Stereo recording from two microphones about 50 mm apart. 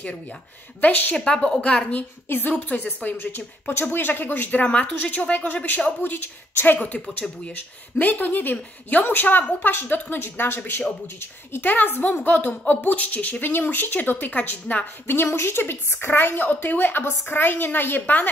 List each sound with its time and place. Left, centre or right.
0.7 s a woman's voice: left
1.1 s a woman's voice: centre
2.2 s a woman's voice: left
9.4 s a woman's voice: left
9.7 s a woman's voice: left
15.0 s a woman's voice: left